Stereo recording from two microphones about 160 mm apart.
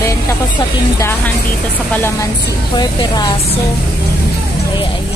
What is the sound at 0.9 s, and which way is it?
Speech, 15° left (ahead or behind).